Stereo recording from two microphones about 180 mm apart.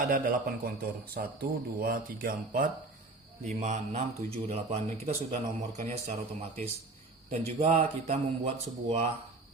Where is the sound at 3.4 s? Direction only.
40° right (ahead or behind).